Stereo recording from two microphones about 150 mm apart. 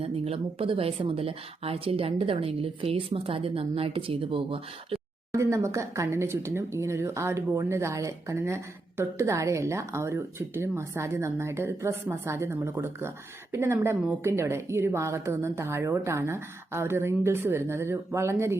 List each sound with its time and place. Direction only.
0.0 s a woman's voice: 40° right (ahead or behind)
5.3 s speech: 20° right (ahead or behind)